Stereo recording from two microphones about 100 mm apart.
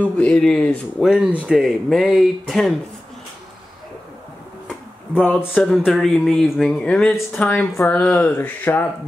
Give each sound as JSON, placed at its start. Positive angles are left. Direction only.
{"t": 0.0, "sound": "speech", "side_deg": 10}
{"t": 5.5, "sound": "speech", "side_deg": 10}